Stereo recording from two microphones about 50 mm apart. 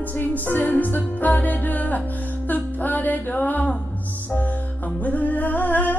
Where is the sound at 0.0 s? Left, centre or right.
Left.